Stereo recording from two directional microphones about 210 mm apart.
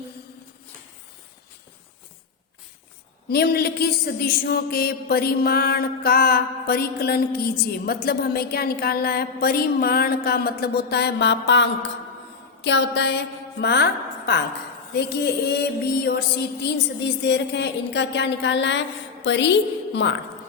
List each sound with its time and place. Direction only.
3.2 s a woman's voice: 45° left (ahead or behind)
17.2 s a woman's voice: 55° left (ahead or behind)